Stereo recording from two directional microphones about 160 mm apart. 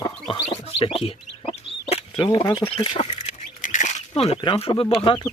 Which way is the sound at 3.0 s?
50° left (ahead or behind).